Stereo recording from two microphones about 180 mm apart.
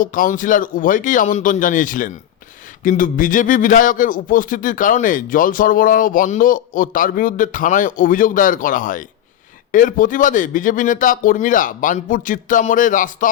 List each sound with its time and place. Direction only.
0.0 s speech: 50° left (ahead or behind)